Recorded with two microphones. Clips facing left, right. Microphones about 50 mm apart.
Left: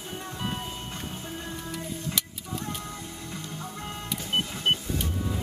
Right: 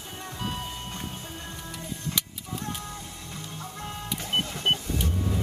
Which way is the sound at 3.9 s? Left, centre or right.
Centre.